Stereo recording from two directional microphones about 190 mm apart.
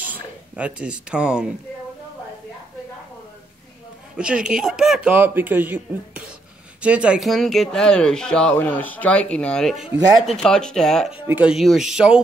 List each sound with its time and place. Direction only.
0.0 s speech: 10° right (ahead or behind)
4.2 s speech: 5° right (ahead or behind)